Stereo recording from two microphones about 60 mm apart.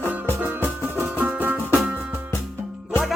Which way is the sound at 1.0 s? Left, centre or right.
Right.